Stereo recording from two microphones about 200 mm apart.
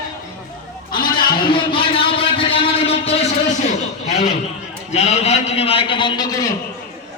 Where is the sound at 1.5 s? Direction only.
25° left (ahead or behind).